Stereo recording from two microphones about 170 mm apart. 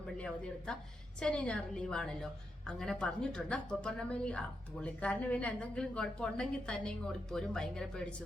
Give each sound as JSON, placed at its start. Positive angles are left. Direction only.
{"t": 0.2, "sound": "a woman's voice", "side_deg": 5}